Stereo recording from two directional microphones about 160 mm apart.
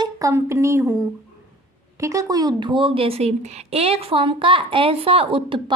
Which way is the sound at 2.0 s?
20° right (ahead or behind).